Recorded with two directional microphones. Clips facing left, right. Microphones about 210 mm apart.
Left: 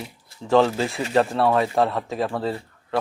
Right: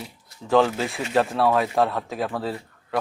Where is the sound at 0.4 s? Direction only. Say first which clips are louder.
Left 1 dB; centre (ahead or behind).